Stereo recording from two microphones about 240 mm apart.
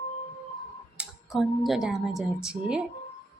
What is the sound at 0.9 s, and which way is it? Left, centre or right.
Speech, centre.